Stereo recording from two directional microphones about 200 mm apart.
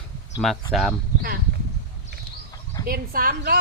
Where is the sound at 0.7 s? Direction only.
Centre (ahead or behind).